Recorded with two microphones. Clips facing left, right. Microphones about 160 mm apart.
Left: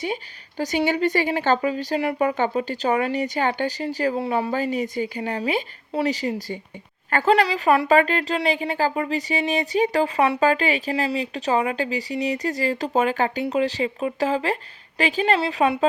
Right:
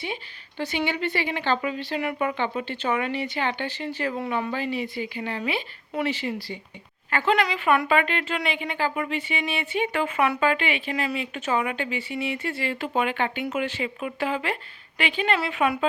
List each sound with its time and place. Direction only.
0.0 s a woman's voice: 40° left (ahead or behind)